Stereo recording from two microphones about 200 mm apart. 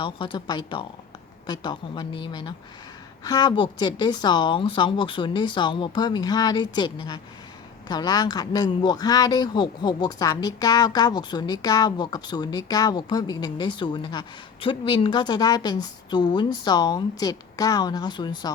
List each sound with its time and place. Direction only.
0.0 s speech: 25° left (ahead or behind)